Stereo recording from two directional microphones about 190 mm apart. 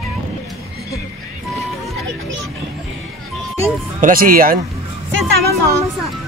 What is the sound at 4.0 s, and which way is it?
Speech, 45° right (ahead or behind).